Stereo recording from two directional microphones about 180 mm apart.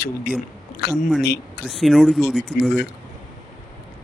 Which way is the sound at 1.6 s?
Centre (ahead or behind).